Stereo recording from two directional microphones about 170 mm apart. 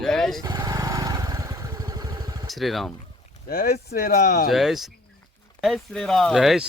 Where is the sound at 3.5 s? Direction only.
60° left (ahead or behind).